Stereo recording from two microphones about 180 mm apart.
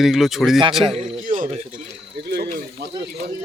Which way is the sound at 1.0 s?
40° right (ahead or behind).